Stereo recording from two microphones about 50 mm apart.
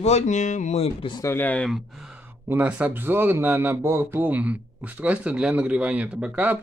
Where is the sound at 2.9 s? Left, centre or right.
Right.